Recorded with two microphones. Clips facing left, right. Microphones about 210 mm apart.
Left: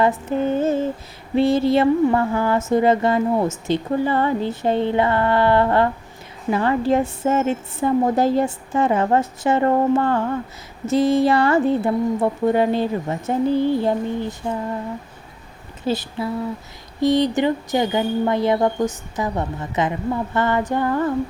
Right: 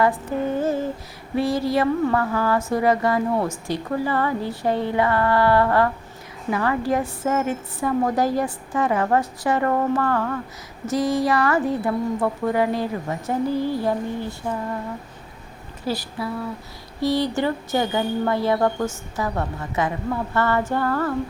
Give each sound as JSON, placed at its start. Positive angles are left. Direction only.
{"t": 0.0, "sound": "female singing", "side_deg": 25}
{"t": 1.4, "sound": "speech", "side_deg": 25}
{"t": 15.8, "sound": "speech", "side_deg": 25}
{"t": 20.3, "sound": "a sound", "side_deg": 20}